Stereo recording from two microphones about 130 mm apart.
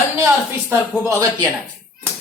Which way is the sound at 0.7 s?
25° right (ahead or behind).